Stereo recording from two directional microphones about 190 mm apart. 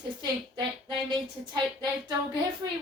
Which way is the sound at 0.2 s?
20° right (ahead or behind).